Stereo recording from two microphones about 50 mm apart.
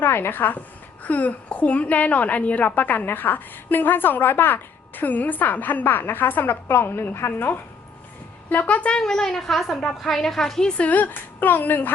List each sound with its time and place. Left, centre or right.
0.0 s a woman's voice: left
7.3 s a woman's voice: left
8.4 s a woman's voice: left
9.0 s a woman's voice: centre
10.8 s a woman's voice: left